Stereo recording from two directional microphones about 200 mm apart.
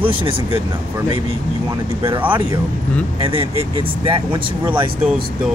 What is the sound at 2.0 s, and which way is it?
Speech, 15° right (ahead or behind).